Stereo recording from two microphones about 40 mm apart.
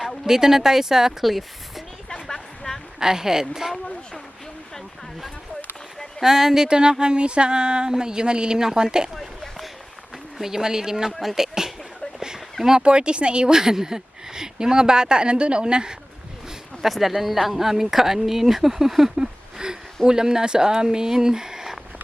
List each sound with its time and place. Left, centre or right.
0.3 s speech: centre
1.2 s speech: centre
2.2 s a sound: centre
3.0 s speech: centre
6.2 s speech: centre
9.1 s a sound: centre
10.3 s speech: centre
12.8 s speech: right
16.8 s speech: centre
19.1 s a sound: centre
20.1 s speech: centre